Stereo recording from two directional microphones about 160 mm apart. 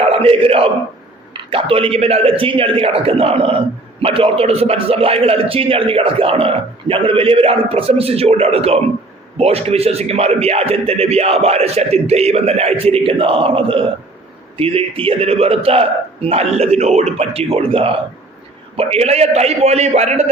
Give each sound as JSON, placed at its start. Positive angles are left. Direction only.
{"t": 0.0, "sound": "a man's voice", "side_deg": -40}